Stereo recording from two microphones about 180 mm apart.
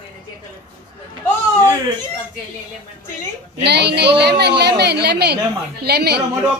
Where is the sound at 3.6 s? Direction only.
70° right (ahead or behind).